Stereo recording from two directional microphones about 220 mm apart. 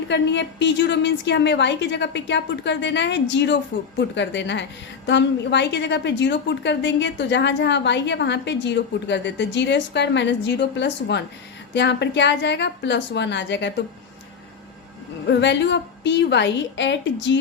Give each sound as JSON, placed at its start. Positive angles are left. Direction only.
{"t": 0.1, "sound": "a woman's voice", "side_deg": 50}
{"t": 15.3, "sound": "a woman's voice", "side_deg": 50}